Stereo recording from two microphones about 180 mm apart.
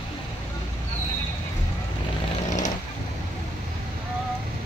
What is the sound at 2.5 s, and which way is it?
Vehicle, 45° left (ahead or behind).